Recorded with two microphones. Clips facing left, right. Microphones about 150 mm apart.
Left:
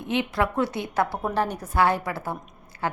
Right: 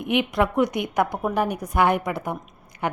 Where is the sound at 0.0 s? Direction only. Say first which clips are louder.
Right 3 dB; 15° right (ahead or behind).